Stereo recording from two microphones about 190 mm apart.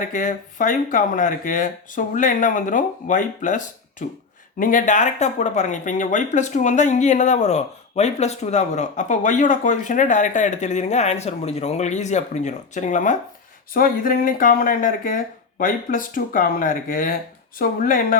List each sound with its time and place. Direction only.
0.1 s speech: 40° left (ahead or behind)